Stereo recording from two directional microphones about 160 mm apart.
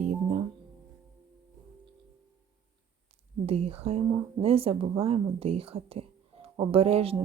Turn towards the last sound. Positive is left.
turn(degrees=-35)  # may be behind; listen again after turning